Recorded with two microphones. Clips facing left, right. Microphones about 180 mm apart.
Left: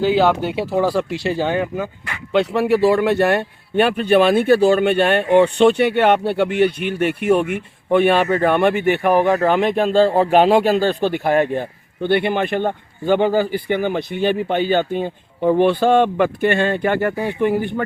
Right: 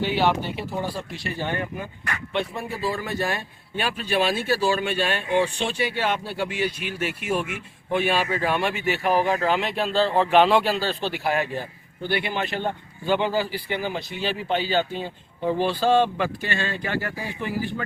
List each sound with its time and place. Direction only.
0.5 s a man's voice: 85° left; by 17.8 s 60° left (ahead or behind)